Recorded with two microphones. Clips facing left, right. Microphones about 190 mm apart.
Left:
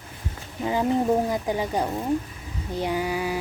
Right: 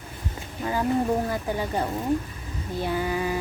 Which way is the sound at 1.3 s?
15° left (ahead or behind).